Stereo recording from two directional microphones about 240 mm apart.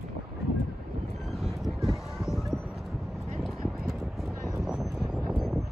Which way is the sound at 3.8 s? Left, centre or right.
Centre.